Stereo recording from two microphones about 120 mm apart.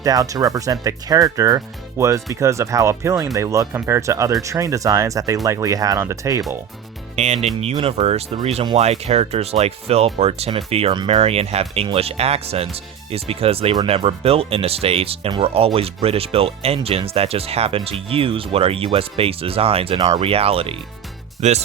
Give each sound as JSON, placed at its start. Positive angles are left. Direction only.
{"t": 0.0, "sound": "speech", "side_deg": -30}
{"t": 7.2, "sound": "speech", "side_deg": -65}
{"t": 7.6, "sound": "speech", "side_deg": -55}
{"t": 21.4, "sound": "speech", "side_deg": -70}